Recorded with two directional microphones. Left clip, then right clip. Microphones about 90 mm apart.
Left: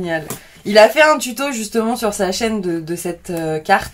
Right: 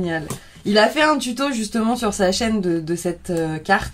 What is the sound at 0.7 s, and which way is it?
Speech, 10° right (ahead or behind).